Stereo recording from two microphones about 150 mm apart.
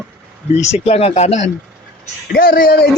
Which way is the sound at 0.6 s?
45° left (ahead or behind).